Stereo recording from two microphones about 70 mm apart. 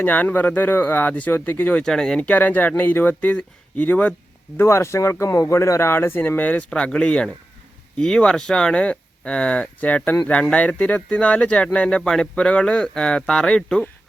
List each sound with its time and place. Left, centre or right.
0.0 s speech: left
1.8 s speech: centre
2.2 s speech: left
4.5 s speech: left; by 13.8 s centre